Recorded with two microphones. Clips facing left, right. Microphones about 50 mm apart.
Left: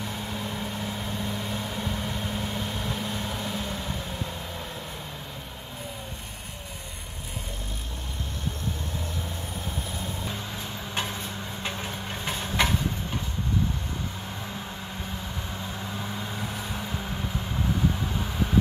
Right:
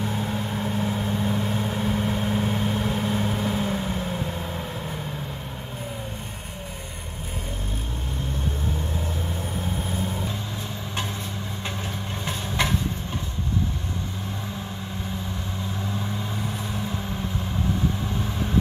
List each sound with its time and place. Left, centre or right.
0.0 s vehicle: centre